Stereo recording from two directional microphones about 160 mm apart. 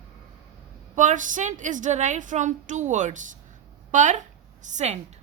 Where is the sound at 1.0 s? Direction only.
55° right (ahead or behind).